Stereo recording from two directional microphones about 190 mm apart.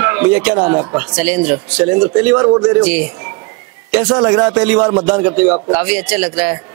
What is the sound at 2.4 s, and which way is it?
Speech, 20° right (ahead or behind).